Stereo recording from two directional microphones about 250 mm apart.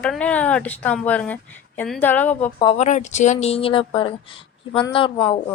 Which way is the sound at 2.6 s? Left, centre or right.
Left.